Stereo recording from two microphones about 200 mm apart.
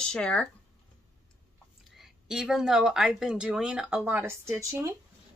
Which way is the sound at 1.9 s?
Centre (ahead or behind).